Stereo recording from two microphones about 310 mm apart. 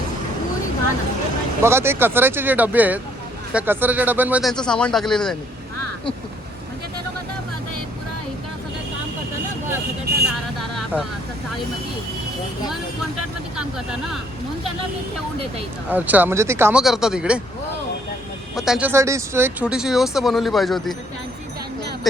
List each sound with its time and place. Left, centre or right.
1.6 s speech: centre
10.1 s vehicle: right
10.6 s vehicle: centre
15.9 s speech: centre
18.5 s speech: centre